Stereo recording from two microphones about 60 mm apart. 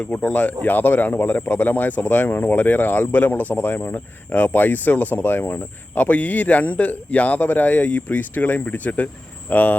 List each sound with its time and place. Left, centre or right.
0.1 s speech: centre
0.6 s speech: left